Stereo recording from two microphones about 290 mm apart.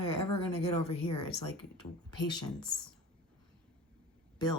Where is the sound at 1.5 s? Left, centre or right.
Centre.